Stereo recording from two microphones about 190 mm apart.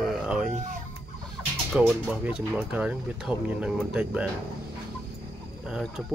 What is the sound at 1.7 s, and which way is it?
Speech, 5° right (ahead or behind).